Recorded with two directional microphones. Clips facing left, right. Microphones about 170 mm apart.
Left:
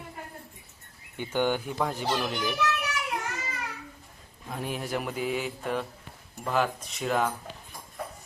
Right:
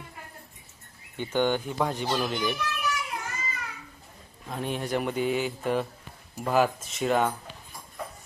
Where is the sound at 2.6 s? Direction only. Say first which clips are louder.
Left 2 dB; 70° left (ahead or behind).